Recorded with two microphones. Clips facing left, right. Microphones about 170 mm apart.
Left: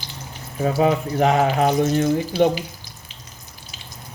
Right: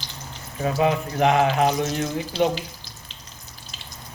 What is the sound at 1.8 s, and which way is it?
Speech, 50° left (ahead or behind).